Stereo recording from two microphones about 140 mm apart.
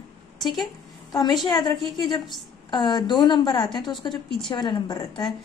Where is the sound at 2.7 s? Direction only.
30° left (ahead or behind).